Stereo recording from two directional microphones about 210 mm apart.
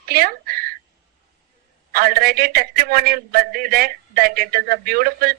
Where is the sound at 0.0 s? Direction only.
45° right (ahead or behind).